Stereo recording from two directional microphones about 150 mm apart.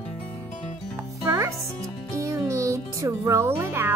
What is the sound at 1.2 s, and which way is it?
Music, 20° right (ahead or behind).